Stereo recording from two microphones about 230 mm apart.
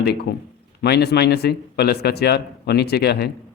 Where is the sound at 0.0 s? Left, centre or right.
Left.